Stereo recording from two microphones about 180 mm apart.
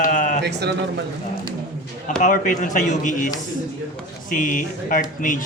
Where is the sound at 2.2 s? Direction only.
45° left (ahead or behind).